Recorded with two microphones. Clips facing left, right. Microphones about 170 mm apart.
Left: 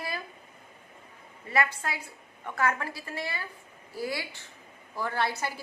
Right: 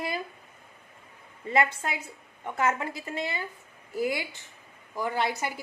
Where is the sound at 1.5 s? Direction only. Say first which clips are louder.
Right 3 dB; 20° right (ahead or behind).